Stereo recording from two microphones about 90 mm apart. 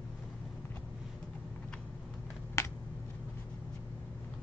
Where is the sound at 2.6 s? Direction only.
30° left (ahead or behind).